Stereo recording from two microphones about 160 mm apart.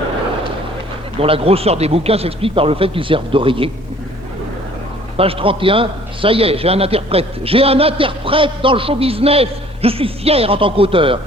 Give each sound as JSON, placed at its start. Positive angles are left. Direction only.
{"t": 1.2, "sound": "a man's voice", "side_deg": -35}
{"t": 5.1, "sound": "a man's voice", "side_deg": -35}